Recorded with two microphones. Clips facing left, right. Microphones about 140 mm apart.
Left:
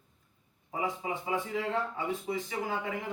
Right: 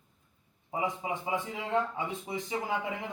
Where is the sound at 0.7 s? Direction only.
20° right (ahead or behind).